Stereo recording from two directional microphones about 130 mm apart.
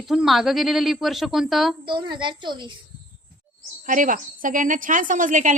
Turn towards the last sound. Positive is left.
turn(degrees=-75)  # may be behind; listen again after turning